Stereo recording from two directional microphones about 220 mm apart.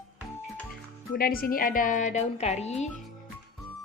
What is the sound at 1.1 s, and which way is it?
A woman's voice, 40° left (ahead or behind).